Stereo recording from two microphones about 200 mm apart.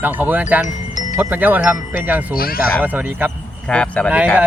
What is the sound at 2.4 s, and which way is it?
Speech, 50° left (ahead or behind).